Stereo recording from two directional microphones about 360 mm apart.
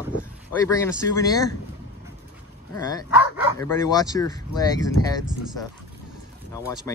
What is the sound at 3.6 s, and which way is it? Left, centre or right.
Speech, centre.